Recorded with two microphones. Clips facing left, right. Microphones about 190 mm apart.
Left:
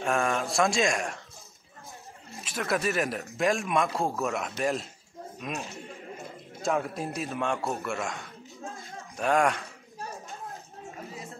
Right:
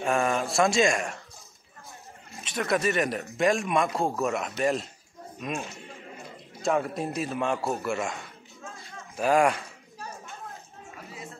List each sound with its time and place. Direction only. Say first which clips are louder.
0.0 s a man's voice: right 2 dB; centre (ahead or behind)
2.3 s a man's voice: right 2 dB; centre (ahead or behind)
10.5 s a sound: left 3 dB; 35° left (ahead or behind)